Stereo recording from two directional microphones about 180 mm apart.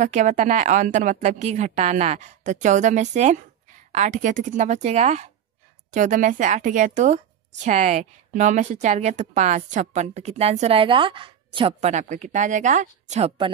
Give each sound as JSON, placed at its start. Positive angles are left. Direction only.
{"t": 0.0, "sound": "a woman's voice", "side_deg": -40}